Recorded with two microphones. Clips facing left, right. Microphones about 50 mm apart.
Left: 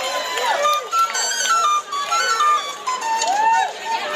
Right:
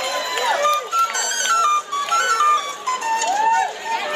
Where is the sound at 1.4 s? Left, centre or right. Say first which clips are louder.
Even; right.